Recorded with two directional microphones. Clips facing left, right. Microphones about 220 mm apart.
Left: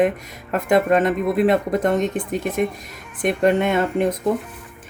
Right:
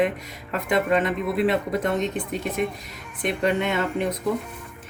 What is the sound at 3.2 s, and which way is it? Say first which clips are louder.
Speech: left 5 dB; 50° left (ahead or behind).